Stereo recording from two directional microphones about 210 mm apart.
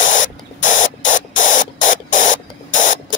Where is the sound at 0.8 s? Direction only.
35° left (ahead or behind).